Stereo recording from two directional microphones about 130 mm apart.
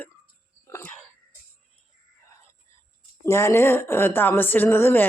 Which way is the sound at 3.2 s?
20° left (ahead or behind).